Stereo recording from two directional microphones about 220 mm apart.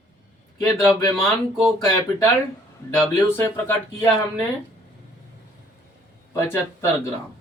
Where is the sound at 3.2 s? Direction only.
10° left (ahead or behind).